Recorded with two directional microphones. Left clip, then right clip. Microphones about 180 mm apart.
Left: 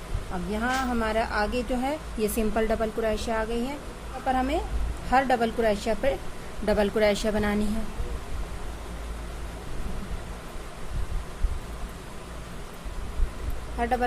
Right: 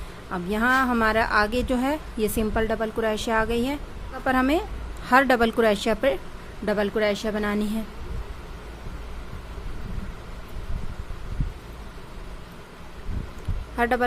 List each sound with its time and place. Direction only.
0.5 s a woman's voice: 40° right (ahead or behind)
6.7 s a woman's voice: 20° right (ahead or behind)
13.7 s speech: 35° right (ahead or behind)